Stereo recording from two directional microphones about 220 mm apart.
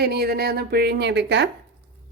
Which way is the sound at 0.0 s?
45° right (ahead or behind).